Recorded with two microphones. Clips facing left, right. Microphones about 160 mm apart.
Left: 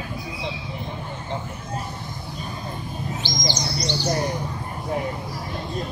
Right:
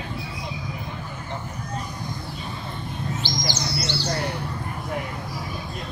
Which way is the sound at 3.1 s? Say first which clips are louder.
Left 2 dB; 15° left (ahead or behind).